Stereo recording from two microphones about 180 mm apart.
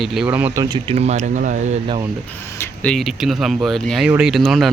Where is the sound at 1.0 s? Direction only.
40° right (ahead or behind).